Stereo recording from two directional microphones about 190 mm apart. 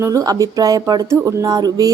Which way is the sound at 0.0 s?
15° right (ahead or behind).